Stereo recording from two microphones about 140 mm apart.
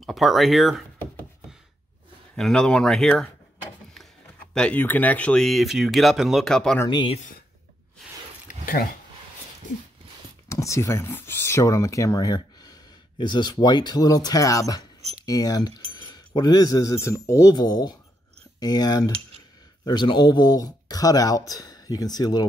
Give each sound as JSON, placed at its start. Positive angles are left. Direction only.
{"t": 0.0, "sound": "speech", "side_deg": 0}
{"t": 2.3, "sound": "speech", "side_deg": 5}
{"t": 4.6, "sound": "speech", "side_deg": 10}
{"t": 6.9, "sound": "speech", "side_deg": 35}
{"t": 10.5, "sound": "speech", "side_deg": 20}
{"t": 15.0, "sound": "a sound", "side_deg": -50}
{"t": 15.2, "sound": "speech", "side_deg": 25}